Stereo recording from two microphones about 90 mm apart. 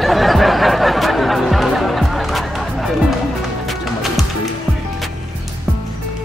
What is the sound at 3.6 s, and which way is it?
Music, centre (ahead or behind).